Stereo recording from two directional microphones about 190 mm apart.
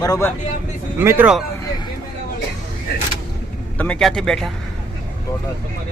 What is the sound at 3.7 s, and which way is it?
Speech, 5° left (ahead or behind).